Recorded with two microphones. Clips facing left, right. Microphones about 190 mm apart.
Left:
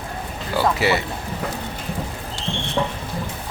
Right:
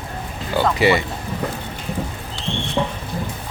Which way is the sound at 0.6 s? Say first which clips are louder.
Right 3 dB; centre (ahead or behind).